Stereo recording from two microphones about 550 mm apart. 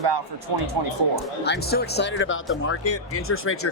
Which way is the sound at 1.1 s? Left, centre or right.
Centre.